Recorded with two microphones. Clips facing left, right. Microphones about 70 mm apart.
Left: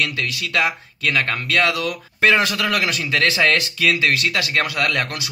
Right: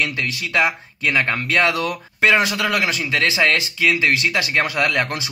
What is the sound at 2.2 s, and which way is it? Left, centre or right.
Speech, centre.